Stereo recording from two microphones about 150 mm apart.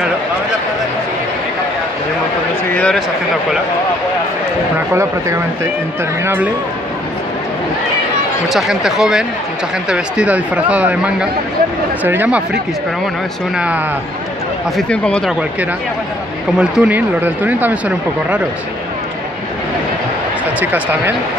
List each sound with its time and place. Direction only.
2.7 s speech: 10° left (ahead or behind)
4.7 s speech: 20° right (ahead or behind)
8.5 s speech: 5° right (ahead or behind)
14.8 s speech: 5° left (ahead or behind)
16.5 s speech: 5° right (ahead or behind)
20.6 s speech: 10° right (ahead or behind)